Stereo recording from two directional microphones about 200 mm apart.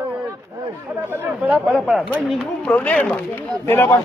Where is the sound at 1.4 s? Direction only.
5° right (ahead or behind).